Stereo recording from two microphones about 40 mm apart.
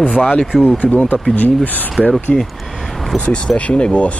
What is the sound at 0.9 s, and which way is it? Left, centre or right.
Speech, left.